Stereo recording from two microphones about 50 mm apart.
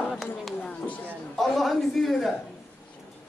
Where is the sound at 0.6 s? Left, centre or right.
Left.